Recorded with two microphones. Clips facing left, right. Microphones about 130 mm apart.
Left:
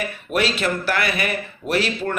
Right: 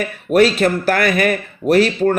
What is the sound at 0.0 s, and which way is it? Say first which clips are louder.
Speech: right 9 dB; 45° right (ahead or behind).